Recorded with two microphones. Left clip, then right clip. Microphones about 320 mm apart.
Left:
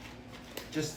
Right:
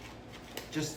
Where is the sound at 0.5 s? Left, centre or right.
Centre.